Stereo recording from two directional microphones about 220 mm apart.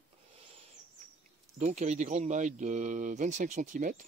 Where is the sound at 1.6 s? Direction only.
30° right (ahead or behind).